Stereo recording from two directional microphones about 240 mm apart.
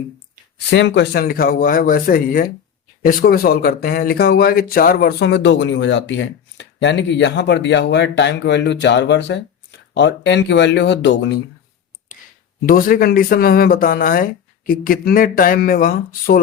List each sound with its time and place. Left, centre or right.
0.7 s speech: left
12.6 s speech: left